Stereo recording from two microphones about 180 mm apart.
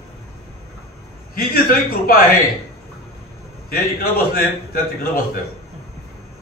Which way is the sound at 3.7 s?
55° left (ahead or behind).